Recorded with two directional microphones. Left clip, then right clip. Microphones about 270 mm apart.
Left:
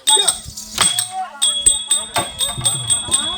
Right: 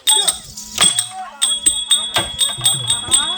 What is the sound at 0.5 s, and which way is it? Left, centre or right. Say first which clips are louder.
Livestock: right 2 dB; centre.